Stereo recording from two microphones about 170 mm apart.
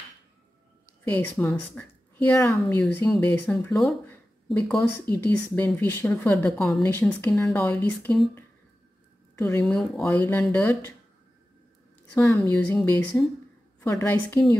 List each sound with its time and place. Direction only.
1.0 s a woman's voice: 10° left (ahead or behind)
12.1 s a woman's voice: 15° left (ahead or behind)